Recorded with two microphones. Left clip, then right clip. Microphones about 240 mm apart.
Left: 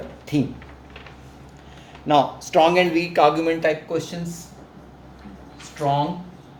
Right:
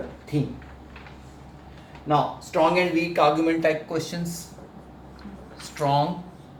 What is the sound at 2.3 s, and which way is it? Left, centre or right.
Speech, left.